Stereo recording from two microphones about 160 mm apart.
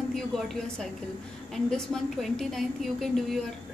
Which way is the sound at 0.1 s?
Centre (ahead or behind).